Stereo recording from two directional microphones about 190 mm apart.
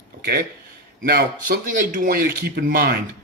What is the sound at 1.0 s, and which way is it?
Speech, 50° right (ahead or behind).